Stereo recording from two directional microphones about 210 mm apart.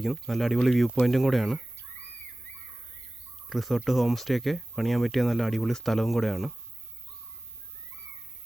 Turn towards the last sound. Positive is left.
turn(degrees=0)  # may be behind; listen again after turning